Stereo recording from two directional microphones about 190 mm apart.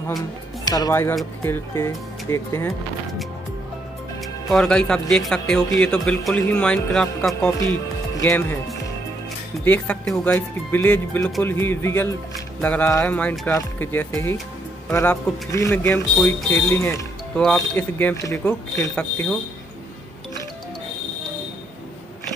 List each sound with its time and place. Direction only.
0.7 s speech: 20° left (ahead or behind)
4.2 s speech: centre (ahead or behind)
7.3 s speech: 15° left (ahead or behind)